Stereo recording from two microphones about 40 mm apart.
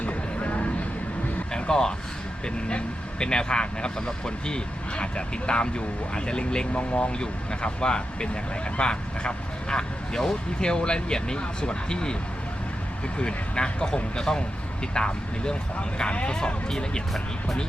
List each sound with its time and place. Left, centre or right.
0.0 s a sound: left
1.5 s vehicle: left
2.6 s speech: left
13.1 s speech: left